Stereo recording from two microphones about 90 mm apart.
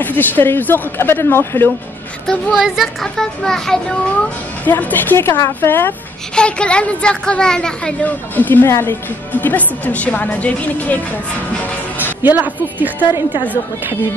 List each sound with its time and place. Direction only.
0.0 s a woman's voice: 20° left (ahead or behind)
2.5 s a child's voice: 5° right (ahead or behind)
4.6 s a woman's voice: 20° left (ahead or behind)
6.3 s a woman's voice: 10° left (ahead or behind)
8.4 s a woman's voice: 20° left (ahead or behind)
12.0 s speech: 20° right (ahead or behind)